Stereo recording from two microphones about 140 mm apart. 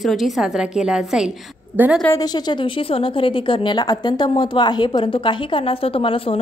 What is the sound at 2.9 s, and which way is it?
A woman's voice, 40° left (ahead or behind).